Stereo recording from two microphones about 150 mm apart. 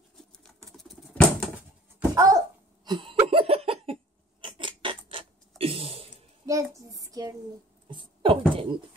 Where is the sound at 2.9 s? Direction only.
35° right (ahead or behind).